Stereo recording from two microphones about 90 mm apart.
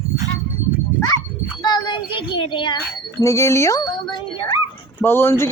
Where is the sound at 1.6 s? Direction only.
55° left (ahead or behind).